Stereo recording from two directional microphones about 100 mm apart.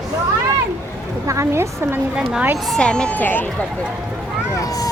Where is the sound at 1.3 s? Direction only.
30° right (ahead or behind).